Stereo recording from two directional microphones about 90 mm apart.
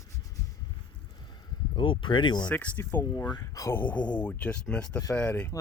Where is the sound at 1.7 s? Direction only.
70° left (ahead or behind).